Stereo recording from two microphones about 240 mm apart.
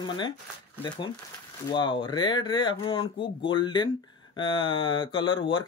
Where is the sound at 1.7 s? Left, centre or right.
Left.